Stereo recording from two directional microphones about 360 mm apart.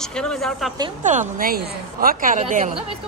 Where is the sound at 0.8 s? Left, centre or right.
Centre.